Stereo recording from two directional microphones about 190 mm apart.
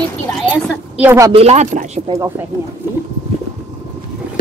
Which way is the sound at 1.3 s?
35° right (ahead or behind).